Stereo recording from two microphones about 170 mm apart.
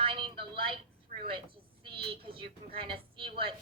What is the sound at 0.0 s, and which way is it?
Telephone, 30° right (ahead or behind).